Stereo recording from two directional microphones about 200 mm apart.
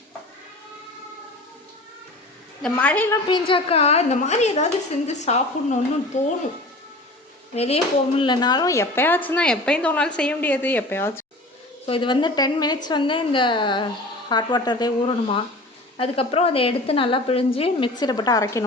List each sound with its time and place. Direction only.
2.6 s speech: 5° left (ahead or behind)
3.2 s a woman's voice: 25° left (ahead or behind)
7.5 s speech: 30° left (ahead or behind); by 11.3 s 10° left (ahead or behind)
11.9 s a woman's voice: 25° left (ahead or behind)